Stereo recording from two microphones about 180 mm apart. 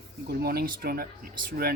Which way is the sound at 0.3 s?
55° right (ahead or behind).